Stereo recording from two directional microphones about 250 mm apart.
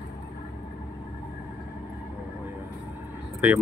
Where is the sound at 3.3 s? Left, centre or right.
Centre.